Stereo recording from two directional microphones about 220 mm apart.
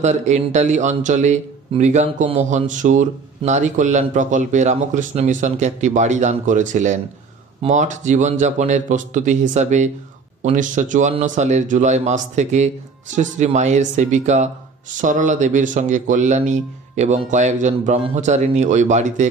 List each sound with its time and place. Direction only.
0.0 s speech: 30° right (ahead or behind)